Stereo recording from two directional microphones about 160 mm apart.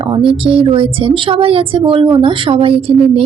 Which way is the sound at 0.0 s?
35° right (ahead or behind).